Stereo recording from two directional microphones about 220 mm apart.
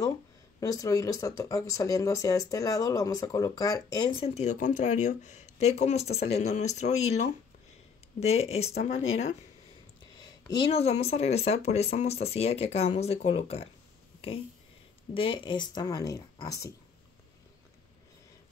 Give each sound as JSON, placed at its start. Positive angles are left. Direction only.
{"t": 0.6, "sound": "speech", "side_deg": 15}
{"t": 15.1, "sound": "speech", "side_deg": 25}